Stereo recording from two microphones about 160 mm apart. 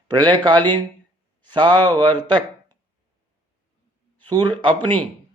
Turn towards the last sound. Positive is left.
turn(degrees=10)  # may be behind; listen again after turning